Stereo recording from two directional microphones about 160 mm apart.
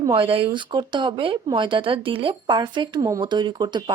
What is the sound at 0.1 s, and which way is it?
Speech, 35° right (ahead or behind).